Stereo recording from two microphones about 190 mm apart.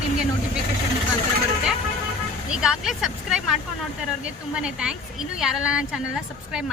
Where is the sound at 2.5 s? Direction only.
5° right (ahead or behind).